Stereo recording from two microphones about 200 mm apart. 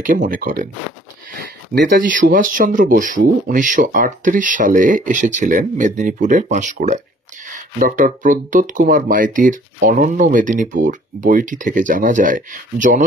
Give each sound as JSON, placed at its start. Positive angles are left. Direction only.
{"t": 0.0, "sound": "speech", "side_deg": -40}